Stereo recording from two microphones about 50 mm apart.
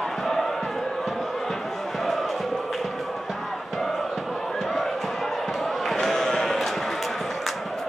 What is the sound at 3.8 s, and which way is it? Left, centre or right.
Music, centre.